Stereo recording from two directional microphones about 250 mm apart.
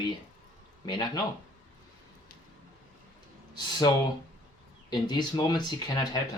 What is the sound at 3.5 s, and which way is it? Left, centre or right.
Speech, centre.